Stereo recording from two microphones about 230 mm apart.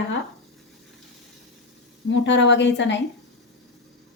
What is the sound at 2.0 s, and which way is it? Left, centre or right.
Speech, left.